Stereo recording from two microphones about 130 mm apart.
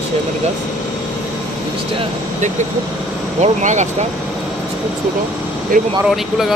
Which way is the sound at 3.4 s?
65° right (ahead or behind).